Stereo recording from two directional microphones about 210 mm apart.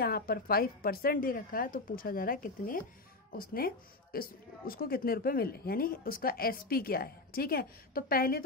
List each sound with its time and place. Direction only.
0.0 s speech: 45° left (ahead or behind)